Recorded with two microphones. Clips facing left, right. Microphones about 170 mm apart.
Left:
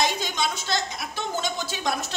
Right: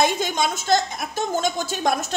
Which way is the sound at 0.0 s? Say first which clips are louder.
Right 5 dB; 50° right (ahead or behind).